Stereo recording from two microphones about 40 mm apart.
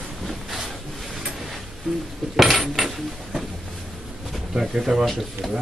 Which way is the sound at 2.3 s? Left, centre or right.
Centre.